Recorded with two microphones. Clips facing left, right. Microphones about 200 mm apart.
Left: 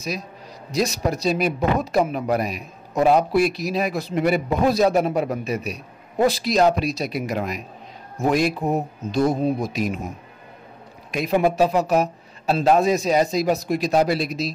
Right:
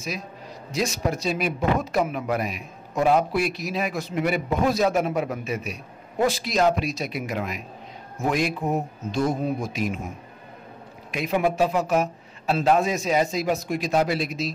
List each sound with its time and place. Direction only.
0.7 s speech: 40° left (ahead or behind)
11.1 s speech: 40° left (ahead or behind)